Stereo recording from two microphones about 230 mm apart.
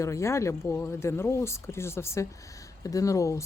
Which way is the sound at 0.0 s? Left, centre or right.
Centre.